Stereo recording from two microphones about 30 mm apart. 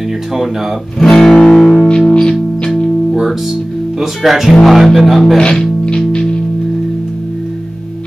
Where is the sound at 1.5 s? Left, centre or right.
Centre.